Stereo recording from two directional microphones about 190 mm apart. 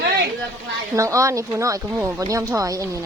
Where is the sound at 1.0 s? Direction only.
15° right (ahead or behind).